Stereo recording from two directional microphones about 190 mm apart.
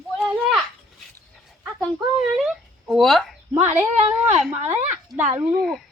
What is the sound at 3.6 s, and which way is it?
Speech, 10° right (ahead or behind).